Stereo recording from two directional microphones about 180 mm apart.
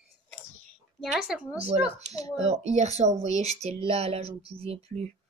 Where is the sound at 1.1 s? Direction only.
5° right (ahead or behind).